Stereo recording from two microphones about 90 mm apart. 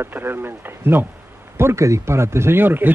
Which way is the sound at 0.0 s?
25° right (ahead or behind).